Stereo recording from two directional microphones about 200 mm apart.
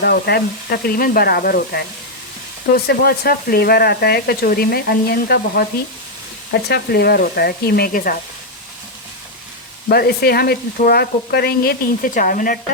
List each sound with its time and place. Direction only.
0.0 s speech: 55° left (ahead or behind)
9.9 s speech: 50° left (ahead or behind)